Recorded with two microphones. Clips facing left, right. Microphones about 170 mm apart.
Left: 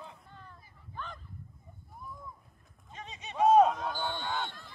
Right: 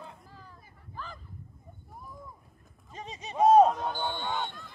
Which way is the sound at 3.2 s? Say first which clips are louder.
Right 3 dB; 40° right (ahead or behind).